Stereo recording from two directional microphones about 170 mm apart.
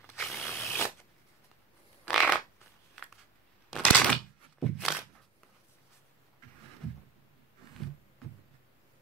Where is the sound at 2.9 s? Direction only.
Centre (ahead or behind).